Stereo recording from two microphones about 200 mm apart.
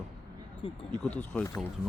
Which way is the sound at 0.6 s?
30° left (ahead or behind).